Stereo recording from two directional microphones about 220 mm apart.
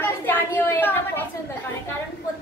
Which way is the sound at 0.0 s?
10° left (ahead or behind).